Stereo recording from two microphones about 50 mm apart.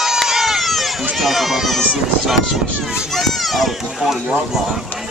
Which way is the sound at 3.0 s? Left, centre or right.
Centre.